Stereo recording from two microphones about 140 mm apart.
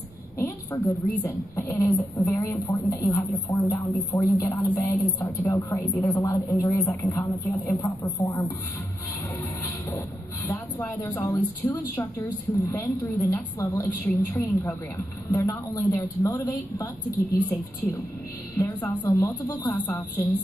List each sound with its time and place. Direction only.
1.2 s speech: 20° left (ahead or behind)
9.8 s speech: 25° left (ahead or behind)
18.6 s speech: 25° left (ahead or behind)